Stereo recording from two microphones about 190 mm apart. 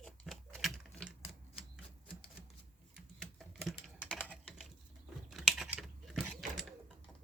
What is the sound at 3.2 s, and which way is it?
Typing, centre (ahead or behind).